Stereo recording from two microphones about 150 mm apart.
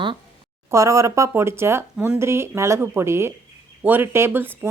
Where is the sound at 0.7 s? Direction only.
20° right (ahead or behind).